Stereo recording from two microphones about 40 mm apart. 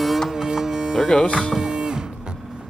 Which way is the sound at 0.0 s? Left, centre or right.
Centre.